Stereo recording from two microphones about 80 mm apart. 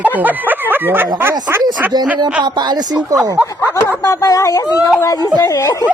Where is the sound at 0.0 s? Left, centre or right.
Right.